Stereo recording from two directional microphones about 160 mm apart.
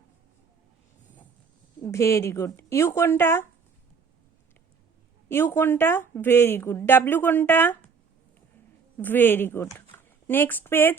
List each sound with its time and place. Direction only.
1.8 s a woman's voice: 20° left (ahead or behind)
5.3 s a woman's voice: 15° left (ahead or behind)
9.0 s a woman's voice: 10° left (ahead or behind)